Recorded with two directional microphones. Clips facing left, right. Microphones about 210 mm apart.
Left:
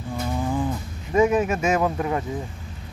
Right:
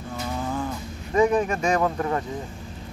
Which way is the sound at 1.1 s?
5° left (ahead or behind).